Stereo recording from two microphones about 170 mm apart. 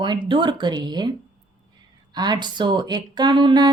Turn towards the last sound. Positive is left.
turn(degrees=-25)  # may be behind; listen again after turning